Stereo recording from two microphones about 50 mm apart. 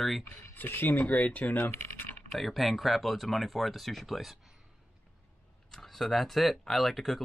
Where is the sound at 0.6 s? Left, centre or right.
Left.